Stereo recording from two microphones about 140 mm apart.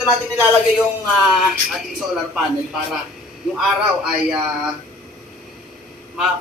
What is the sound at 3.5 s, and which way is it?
Speech, 5° right (ahead or behind).